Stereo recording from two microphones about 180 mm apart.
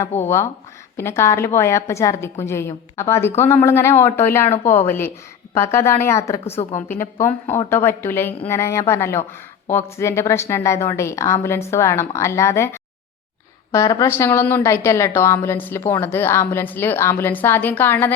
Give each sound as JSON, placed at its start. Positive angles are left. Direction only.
{"t": 0.2, "sound": "a woman's voice", "side_deg": 15}
{"t": 6.4, "sound": "a woman's voice", "side_deg": 35}
{"t": 6.8, "sound": "a woman's voice", "side_deg": 10}